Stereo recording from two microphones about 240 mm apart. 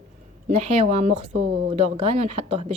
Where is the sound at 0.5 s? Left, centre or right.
Right.